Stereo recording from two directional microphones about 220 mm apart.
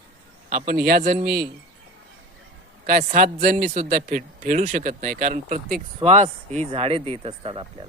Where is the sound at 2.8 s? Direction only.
40° right (ahead or behind); by 7.9 s 20° right (ahead or behind).